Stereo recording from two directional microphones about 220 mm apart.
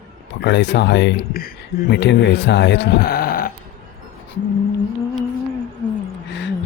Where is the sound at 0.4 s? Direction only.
50° left (ahead or behind).